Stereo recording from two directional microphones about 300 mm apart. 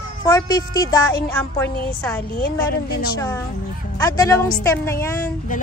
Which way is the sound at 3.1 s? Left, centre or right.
Centre.